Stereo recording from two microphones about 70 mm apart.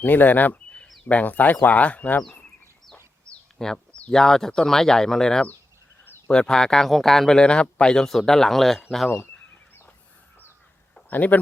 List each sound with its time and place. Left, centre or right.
0.0 s speech: left
2.9 s bird: centre
4.1 s speech: centre
11.1 s speech: left